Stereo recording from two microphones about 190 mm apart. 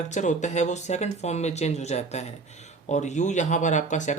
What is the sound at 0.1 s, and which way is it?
Speech, 40° left (ahead or behind).